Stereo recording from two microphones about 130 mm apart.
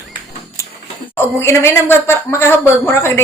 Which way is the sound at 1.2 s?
20° left (ahead or behind).